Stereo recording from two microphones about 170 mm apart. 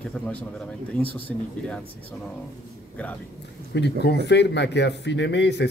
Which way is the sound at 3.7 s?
90° left.